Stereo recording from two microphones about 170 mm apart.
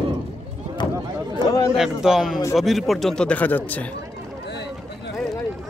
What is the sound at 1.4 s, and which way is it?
Chatter, 20° left (ahead or behind).